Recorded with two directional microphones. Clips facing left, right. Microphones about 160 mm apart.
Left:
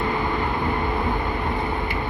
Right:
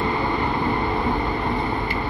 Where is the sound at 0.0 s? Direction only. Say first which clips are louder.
Right 1 dB; 5° left (ahead or behind).